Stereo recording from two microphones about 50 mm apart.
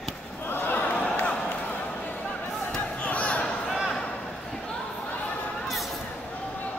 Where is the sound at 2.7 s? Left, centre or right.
Left.